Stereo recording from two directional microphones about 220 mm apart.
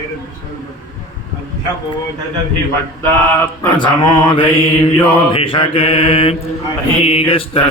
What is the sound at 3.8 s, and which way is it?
Mantra, 20° left (ahead or behind).